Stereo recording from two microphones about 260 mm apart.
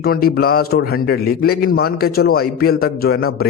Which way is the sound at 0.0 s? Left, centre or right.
Left.